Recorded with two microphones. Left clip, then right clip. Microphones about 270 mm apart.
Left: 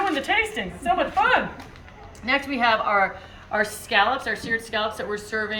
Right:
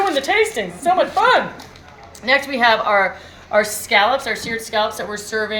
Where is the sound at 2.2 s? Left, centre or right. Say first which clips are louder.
Right 6 dB; right.